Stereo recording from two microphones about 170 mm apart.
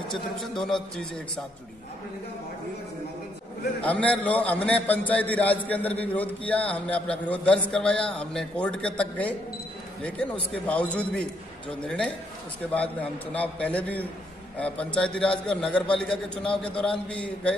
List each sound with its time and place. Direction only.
0.4 s a man's voice: centre (ahead or behind)
3.8 s a man's voice: 10° left (ahead or behind)
10.5 s a man's voice: 5° left (ahead or behind)